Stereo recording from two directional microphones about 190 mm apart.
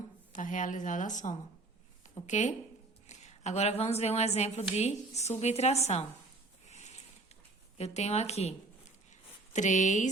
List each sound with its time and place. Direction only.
0.3 s a woman's voice: 45° left (ahead or behind)
6.7 s a sound: 35° left (ahead or behind)
7.8 s a woman's voice: 35° left (ahead or behind)